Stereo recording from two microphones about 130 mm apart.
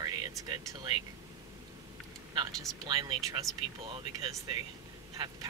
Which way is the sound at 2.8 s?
35° right (ahead or behind).